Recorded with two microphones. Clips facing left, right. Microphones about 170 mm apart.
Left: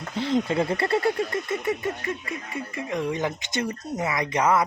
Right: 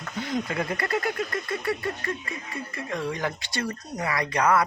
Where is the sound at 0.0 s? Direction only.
25° left (ahead or behind).